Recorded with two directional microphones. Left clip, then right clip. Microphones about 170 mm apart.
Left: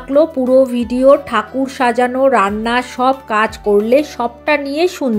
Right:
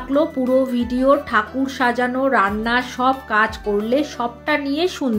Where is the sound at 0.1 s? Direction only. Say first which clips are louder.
Left 7 dB; 35° left (ahead or behind).